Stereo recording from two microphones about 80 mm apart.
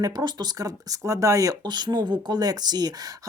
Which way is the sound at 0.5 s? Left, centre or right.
Right.